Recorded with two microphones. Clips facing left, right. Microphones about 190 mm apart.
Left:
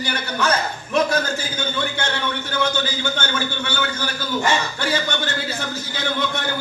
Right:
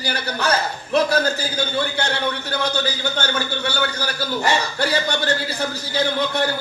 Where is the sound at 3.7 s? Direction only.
35° right (ahead or behind).